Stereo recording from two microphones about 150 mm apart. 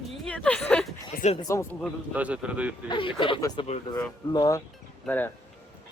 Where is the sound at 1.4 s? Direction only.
20° left (ahead or behind).